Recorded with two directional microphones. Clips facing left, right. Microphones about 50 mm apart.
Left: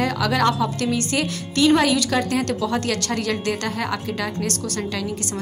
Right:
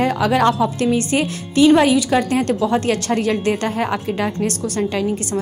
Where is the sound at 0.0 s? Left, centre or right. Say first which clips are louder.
Right 4 dB; right.